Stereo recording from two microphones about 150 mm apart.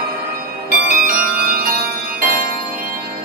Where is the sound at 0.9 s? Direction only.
70° right (ahead or behind).